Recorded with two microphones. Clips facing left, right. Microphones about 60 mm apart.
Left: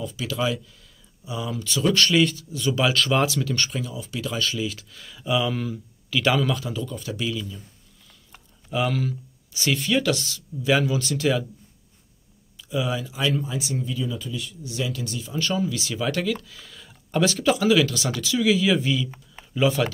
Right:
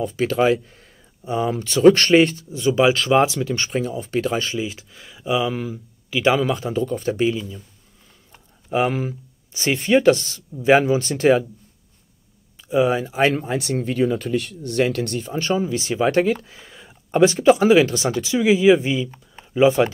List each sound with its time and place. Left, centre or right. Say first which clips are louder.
0.0 s speech: right 8 dB; right
2.7 s speech: right 6 dB; right
3.7 s speech: right 8 dB; right
4.5 s speech: right 2 dB; right
6.5 s speech: right 6 dB; right
8.8 s speech: right 3 dB; right
12.6 s speech: right 8 dB; right
15.2 s speech: right 1 dB; right